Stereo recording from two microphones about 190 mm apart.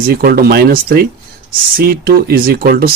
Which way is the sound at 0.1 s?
55° right (ahead or behind).